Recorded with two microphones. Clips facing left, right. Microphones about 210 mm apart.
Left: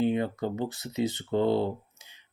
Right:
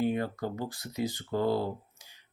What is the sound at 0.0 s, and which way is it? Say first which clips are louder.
Speech: left 3 dB; 20° left (ahead or behind).